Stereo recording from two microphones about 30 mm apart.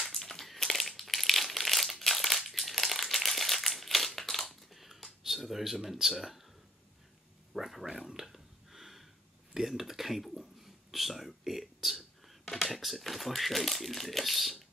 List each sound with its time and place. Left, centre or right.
0.0 s crumpling: centre
4.5 s typewriter: centre
5.9 s speech: centre
7.5 s speech: centre
7.8 s a sound: centre
12.7 s speech: centre